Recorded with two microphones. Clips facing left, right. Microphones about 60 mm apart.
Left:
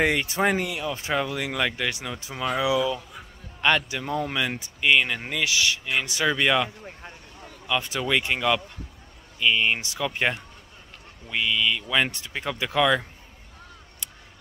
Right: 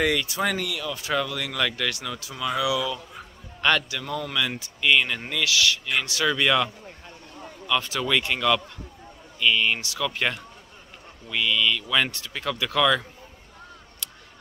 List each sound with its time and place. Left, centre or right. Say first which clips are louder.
0.0 s speech: left 1 dB; left